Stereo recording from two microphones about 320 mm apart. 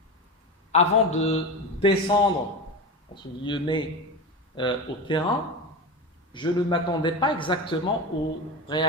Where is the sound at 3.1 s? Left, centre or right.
Centre.